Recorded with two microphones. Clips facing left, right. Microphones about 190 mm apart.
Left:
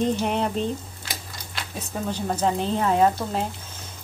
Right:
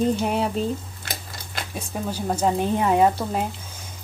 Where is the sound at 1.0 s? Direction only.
50° right (ahead or behind).